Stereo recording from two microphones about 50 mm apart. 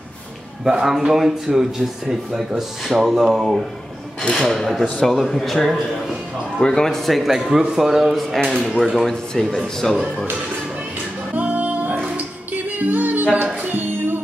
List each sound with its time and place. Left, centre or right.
0.7 s a man's voice: centre
11.3 s music: right